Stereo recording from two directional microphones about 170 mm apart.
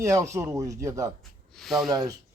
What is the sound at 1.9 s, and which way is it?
Speech, 20° right (ahead or behind).